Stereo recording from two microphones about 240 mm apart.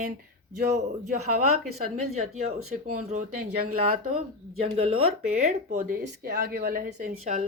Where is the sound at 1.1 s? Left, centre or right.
Right.